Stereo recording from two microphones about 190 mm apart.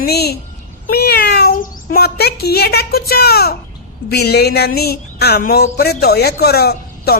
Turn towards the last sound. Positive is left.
turn(degrees=55)  # may be behind; listen again after turning